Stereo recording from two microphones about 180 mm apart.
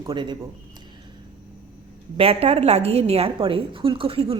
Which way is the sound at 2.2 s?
35° right (ahead or behind).